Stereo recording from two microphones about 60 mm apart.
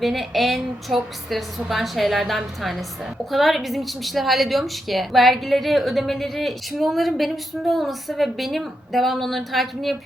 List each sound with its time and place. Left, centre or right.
0.0 s a woman's voice: centre